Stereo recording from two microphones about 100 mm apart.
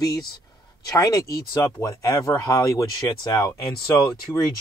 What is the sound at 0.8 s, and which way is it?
Speech, 35° left (ahead or behind).